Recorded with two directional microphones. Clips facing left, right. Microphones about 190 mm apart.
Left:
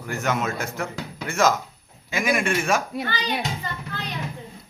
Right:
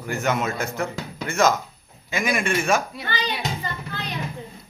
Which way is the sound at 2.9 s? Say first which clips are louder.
Left 2 dB; 50° left (ahead or behind).